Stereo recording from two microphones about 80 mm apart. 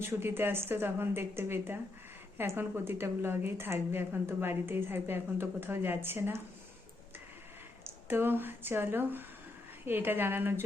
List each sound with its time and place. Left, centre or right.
0.0 s a woman's voice: right
7.9 s a woman's voice: right